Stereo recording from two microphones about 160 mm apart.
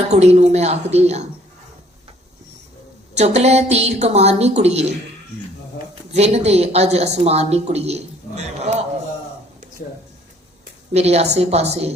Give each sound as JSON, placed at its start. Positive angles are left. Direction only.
{"t": 0.1, "sound": "a woman's voice", "side_deg": -45}
{"t": 3.2, "sound": "a woman's voice", "side_deg": -45}
{"t": 6.1, "sound": "a woman's voice", "side_deg": -40}
{"t": 10.9, "sound": "a woman's voice", "side_deg": -40}